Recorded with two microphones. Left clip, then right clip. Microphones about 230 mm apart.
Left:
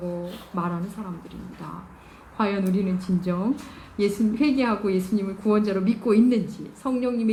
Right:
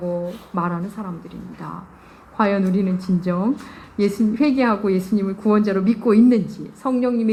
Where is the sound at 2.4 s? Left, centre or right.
Right.